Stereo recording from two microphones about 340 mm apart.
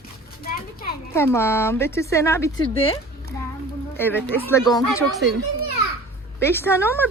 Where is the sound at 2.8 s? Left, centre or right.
Centre.